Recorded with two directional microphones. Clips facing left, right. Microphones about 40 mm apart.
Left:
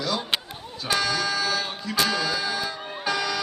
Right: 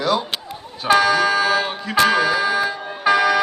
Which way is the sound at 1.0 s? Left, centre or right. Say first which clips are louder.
Right 9 dB; right.